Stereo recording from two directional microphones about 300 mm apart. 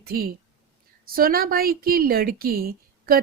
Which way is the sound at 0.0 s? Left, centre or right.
Right.